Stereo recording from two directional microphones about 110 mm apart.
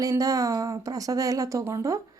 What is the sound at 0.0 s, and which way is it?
Speech, 35° right (ahead or behind).